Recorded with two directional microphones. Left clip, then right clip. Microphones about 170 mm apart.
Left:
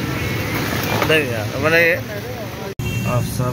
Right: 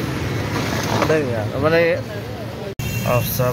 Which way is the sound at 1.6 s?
20° right (ahead or behind).